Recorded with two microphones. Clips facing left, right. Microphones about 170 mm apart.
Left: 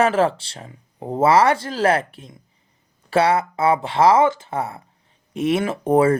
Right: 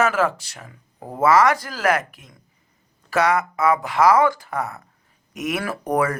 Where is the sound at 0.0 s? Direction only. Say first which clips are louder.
Left 3 dB; 30° left (ahead or behind).